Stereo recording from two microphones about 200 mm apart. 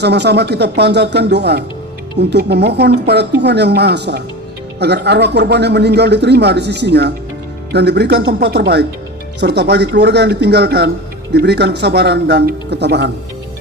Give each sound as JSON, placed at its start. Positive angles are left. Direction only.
{"t": 0.0, "sound": "speech", "side_deg": -55}